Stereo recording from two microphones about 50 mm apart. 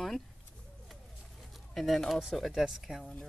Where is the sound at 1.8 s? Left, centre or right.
Centre.